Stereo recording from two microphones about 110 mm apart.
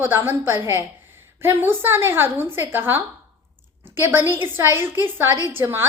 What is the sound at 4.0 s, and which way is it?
A woman's voice, 20° right (ahead or behind).